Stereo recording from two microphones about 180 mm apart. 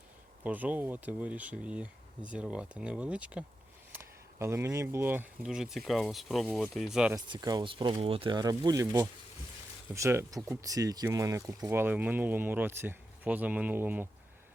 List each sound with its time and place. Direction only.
0.4 s speech: 10° right (ahead or behind)
7.3 s speech: 20° right (ahead or behind)